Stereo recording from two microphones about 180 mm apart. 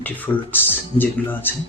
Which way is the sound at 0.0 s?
10° left (ahead or behind).